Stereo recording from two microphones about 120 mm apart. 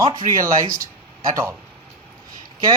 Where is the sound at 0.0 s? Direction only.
30° right (ahead or behind).